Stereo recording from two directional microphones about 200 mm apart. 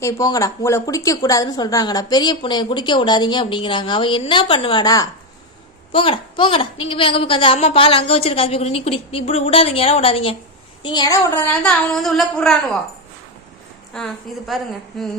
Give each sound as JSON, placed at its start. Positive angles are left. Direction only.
{"t": 0.0, "sound": "a woman's voice", "side_deg": 15}
{"t": 13.9, "sound": "a woman's voice", "side_deg": 0}